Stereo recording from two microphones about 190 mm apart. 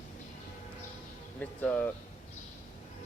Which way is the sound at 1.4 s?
10° left (ahead or behind).